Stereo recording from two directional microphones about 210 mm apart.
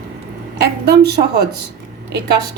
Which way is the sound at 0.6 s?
50° right (ahead or behind).